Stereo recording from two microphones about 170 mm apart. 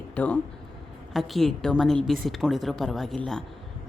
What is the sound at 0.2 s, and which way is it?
Speech, 10° left (ahead or behind).